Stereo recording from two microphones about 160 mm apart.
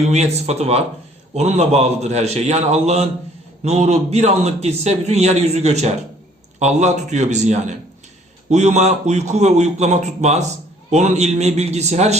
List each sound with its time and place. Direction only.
0.0 s a man's voice: 45° right (ahead or behind)